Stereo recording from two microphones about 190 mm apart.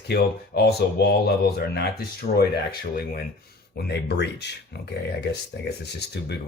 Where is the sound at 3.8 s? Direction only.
60° left (ahead or behind).